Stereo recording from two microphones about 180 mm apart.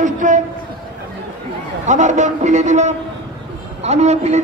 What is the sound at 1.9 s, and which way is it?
A man's voice, 40° right (ahead or behind).